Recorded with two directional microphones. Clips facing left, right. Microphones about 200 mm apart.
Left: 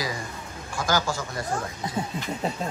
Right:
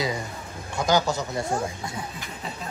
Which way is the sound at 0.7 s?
20° right (ahead or behind).